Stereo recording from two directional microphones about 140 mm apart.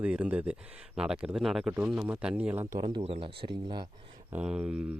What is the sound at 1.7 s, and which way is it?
Speech, 10° right (ahead or behind).